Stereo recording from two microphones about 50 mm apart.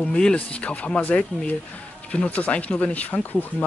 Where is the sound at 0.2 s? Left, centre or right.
Left.